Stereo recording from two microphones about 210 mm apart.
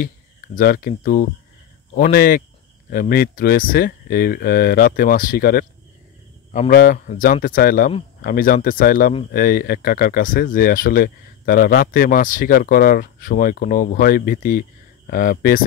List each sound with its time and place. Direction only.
0.6 s speech: 45° left (ahead or behind)
6.7 s speech: 45° left (ahead or behind)